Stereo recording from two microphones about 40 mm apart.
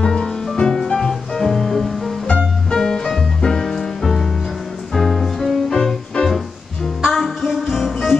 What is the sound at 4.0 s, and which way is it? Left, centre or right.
Music, centre.